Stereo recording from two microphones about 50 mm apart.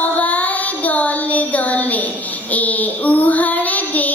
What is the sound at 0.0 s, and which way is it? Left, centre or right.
Child singing, left.